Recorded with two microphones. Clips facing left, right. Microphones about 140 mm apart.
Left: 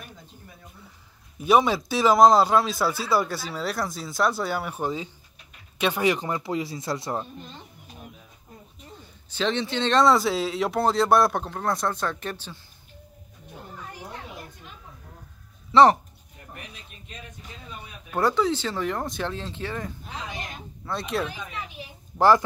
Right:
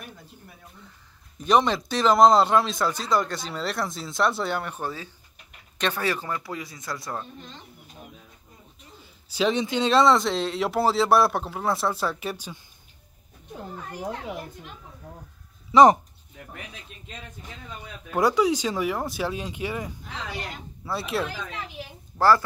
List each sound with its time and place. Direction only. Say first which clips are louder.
1.4 s speech: left 1 dB; 5° left (ahead or behind); by 7.2 s 25° left (ahead or behind)
9.3 s speech: right 2 dB; 10° right (ahead or behind)
15.7 s speech: right 1 dB; 15° right (ahead or behind)
18.1 s speech: right 2 dB; 10° right (ahead or behind)
20.1 s a woman's voice: right 1 dB; 15° left (ahead or behind)
20.8 s speech: even; 5° right (ahead or behind)